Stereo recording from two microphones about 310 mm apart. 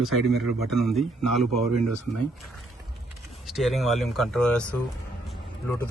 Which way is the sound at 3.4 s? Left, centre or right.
Centre.